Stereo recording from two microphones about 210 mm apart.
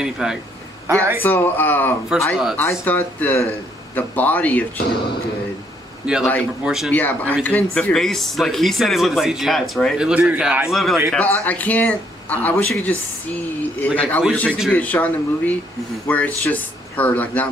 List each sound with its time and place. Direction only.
0.0 s speech: 5° right (ahead or behind)
1.2 s speech: 10° left (ahead or behind)
4.7 s speech: 50° left (ahead or behind)
6.0 s speech: 5° right (ahead or behind)